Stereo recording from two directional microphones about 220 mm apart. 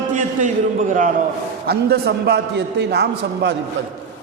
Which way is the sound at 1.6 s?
45° right (ahead or behind).